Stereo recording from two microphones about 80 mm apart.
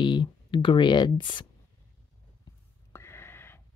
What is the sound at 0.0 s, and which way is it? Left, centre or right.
Speech, left.